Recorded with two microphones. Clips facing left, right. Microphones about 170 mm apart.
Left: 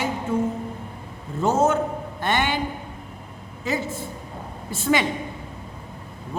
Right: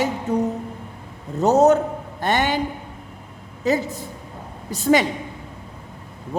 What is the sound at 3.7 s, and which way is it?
A woman's voice, 40° right (ahead or behind).